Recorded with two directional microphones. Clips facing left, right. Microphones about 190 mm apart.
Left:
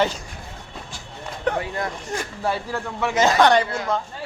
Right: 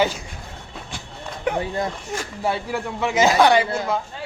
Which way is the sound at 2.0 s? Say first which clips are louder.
Right 1 dB; 15° right (ahead or behind).